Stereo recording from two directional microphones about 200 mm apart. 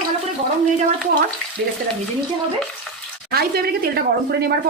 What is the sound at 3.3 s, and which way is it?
Speech, 50° right (ahead or behind).